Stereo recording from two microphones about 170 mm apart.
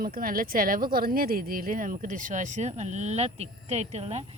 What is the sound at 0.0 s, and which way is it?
A woman's voice, 55° right (ahead or behind).